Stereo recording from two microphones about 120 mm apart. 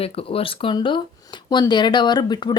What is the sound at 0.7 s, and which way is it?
Speech, 40° left (ahead or behind).